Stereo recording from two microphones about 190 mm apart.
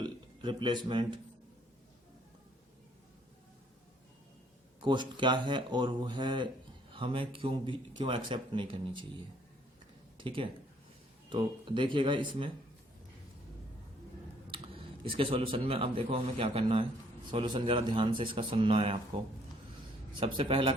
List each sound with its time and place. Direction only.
0.0 s speech: 25° right (ahead or behind)
4.8 s speech: 25° right (ahead or behind)
15.0 s speech: 30° right (ahead or behind)
20.1 s speech: 25° right (ahead or behind)